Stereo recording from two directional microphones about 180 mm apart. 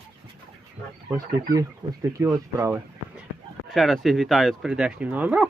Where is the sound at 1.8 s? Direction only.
10° right (ahead or behind).